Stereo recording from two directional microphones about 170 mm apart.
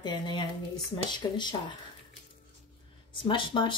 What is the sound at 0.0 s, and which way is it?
Speech, 25° left (ahead or behind).